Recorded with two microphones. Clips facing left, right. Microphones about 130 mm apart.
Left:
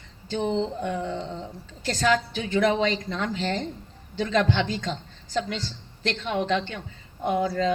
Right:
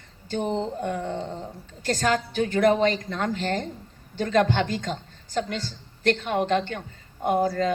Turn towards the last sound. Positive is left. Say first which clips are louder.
# right 1 dB
turn(degrees=-45)  # may be behind; listen again after turning